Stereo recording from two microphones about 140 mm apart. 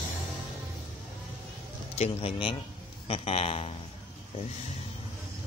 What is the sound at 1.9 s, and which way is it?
Speech, 45° left (ahead or behind).